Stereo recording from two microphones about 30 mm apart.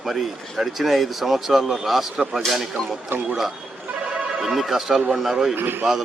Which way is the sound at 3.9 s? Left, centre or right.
Right.